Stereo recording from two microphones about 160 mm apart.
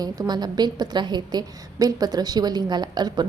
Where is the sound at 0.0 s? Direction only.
25° right (ahead or behind).